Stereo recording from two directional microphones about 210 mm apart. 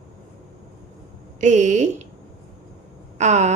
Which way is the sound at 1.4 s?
35° right (ahead or behind).